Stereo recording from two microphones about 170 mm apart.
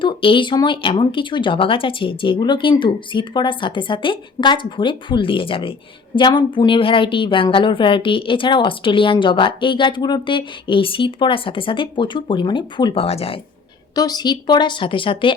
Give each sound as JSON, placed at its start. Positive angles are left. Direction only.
{"t": 0.0, "sound": "a woman's voice", "side_deg": 30}
{"t": 13.9, "sound": "a woman's voice", "side_deg": 25}